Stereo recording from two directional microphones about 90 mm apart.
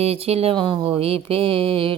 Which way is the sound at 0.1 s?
90° right.